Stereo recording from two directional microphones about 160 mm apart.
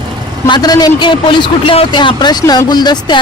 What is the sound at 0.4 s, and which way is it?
Speech, 25° left (ahead or behind).